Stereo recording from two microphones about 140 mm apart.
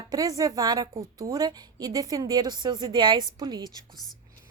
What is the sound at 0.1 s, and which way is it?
A woman's voice, 25° right (ahead or behind).